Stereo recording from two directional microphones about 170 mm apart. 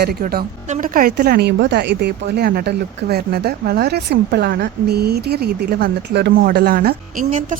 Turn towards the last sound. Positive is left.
turn(degrees=-55)  # may be behind; listen again after turning